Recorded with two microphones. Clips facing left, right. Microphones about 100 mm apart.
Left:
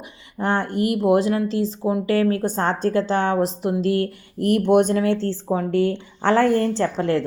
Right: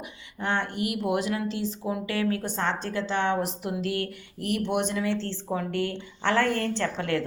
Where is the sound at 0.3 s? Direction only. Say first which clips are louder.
Left 7 dB; 40° left (ahead or behind).